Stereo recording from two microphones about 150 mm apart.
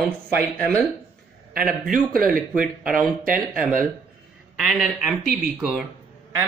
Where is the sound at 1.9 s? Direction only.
70° right (ahead or behind).